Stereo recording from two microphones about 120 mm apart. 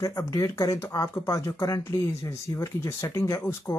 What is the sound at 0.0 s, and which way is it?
Speech, 25° left (ahead or behind).